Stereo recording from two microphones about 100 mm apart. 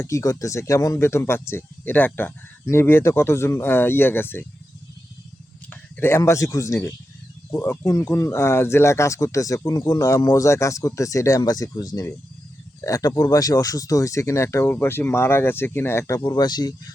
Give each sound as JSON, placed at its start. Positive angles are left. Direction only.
{"t": 0.0, "sound": "speech", "side_deg": 30}
{"t": 5.7, "sound": "speech", "side_deg": 20}